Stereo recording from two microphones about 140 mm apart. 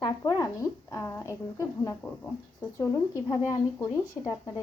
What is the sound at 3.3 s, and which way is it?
A woman's voice, 25° left (ahead or behind).